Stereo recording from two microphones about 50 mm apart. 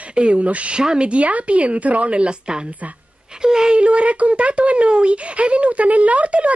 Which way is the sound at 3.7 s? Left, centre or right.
Right.